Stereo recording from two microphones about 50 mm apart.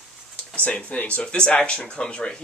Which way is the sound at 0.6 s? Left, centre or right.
Left.